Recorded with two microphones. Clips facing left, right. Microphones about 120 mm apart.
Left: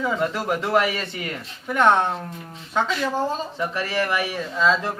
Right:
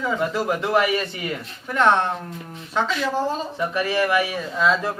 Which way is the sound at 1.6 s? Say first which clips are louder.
Even; 5° left (ahead or behind).